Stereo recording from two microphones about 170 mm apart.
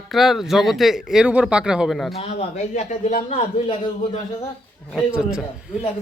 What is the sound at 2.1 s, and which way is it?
A man's voice, 35° left (ahead or behind).